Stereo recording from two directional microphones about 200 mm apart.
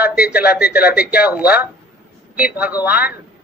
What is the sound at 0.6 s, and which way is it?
Speech, 50° left (ahead or behind).